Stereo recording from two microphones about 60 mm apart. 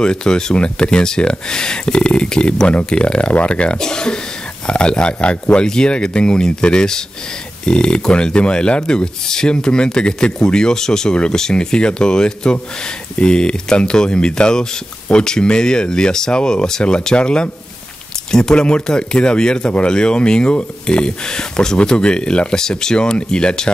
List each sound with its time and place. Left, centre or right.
0.0 s speech: centre